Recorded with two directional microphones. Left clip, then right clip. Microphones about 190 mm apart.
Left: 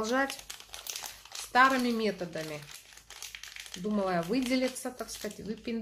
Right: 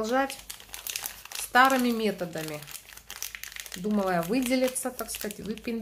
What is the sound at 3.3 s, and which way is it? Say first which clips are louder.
Speech: right 4 dB; 10° right (ahead or behind).